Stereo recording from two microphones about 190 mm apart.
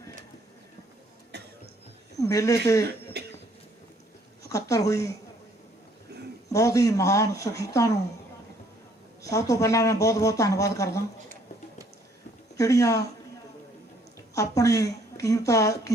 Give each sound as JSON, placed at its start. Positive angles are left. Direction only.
{"t": 1.3, "sound": "cough", "side_deg": -60}
{"t": 2.1, "sound": "speech", "side_deg": 15}
{"t": 2.8, "sound": "cough", "side_deg": -60}
{"t": 4.4, "sound": "speech", "side_deg": 15}
{"t": 6.5, "sound": "speech", "side_deg": 15}
{"t": 9.2, "sound": "speech", "side_deg": 15}
{"t": 12.5, "sound": "speech", "side_deg": 15}
{"t": 14.3, "sound": "speech", "side_deg": 15}